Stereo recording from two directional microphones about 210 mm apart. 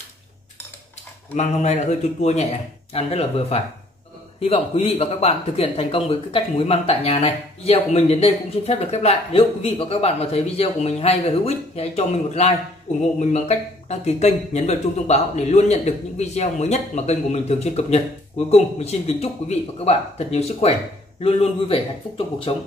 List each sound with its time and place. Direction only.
1.3 s speech: 35° left (ahead or behind)